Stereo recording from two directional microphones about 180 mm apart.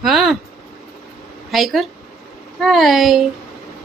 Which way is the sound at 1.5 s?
Centre (ahead or behind).